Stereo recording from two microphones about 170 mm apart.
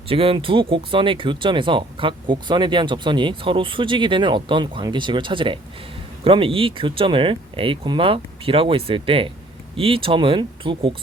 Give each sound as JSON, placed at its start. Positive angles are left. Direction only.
{"t": 0.1, "sound": "speech", "side_deg": -30}